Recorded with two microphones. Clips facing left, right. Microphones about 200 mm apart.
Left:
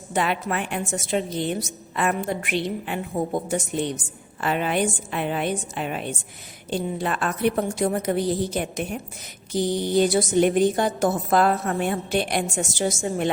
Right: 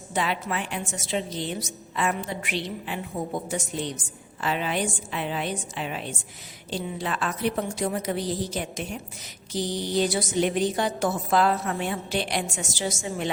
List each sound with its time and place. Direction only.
0.1 s a woman's voice: 55° left (ahead or behind)